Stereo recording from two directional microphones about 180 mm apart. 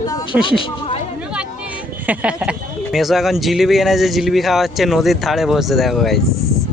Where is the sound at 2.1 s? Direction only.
5° right (ahead or behind).